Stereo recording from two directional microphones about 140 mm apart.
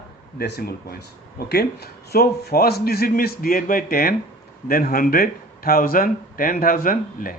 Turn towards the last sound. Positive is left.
turn(degrees=90)